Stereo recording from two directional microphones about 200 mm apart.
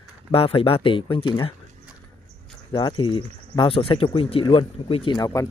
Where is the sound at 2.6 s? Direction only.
25° left (ahead or behind).